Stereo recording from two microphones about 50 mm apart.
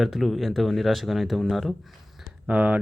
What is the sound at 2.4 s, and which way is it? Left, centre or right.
Speech, right.